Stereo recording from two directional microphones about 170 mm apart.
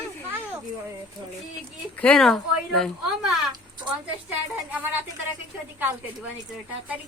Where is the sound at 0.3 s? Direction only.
10° right (ahead or behind).